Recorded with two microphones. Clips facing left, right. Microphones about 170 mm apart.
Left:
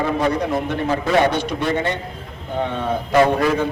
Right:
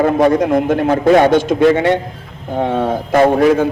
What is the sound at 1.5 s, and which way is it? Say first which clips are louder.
Speech: right 10 dB; 90° right.